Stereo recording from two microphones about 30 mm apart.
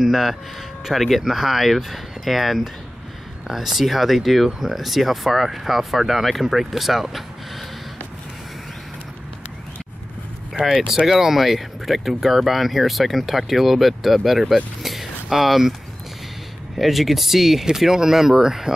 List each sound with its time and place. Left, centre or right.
0.0 s speech: centre
1.2 s speech: centre
10.6 s speech: centre
16.7 s speech: centre